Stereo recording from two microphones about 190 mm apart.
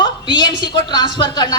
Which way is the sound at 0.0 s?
25° left (ahead or behind).